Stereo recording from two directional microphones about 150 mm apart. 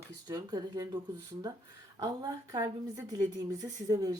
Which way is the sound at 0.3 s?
25° right (ahead or behind).